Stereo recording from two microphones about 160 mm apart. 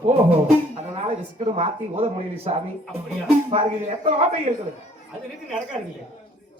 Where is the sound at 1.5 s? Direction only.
40° right (ahead or behind).